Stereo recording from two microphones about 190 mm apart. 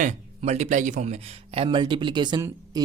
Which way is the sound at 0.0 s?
40° right (ahead or behind).